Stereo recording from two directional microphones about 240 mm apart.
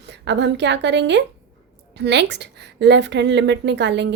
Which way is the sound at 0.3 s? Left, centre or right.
Right.